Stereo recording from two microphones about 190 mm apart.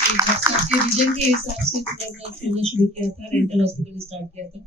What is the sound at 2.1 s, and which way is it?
Speech, 30° right (ahead or behind).